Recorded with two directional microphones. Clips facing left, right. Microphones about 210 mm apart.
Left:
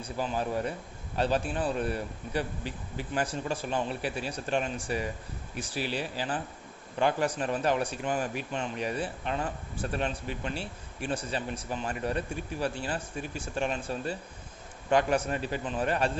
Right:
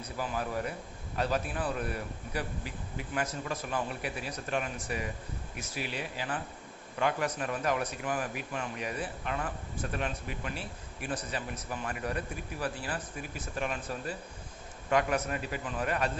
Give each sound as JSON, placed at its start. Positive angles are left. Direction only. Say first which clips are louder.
{"t": 0.0, "sound": "a man's voice", "louder": "left 3 dB", "side_deg": 25}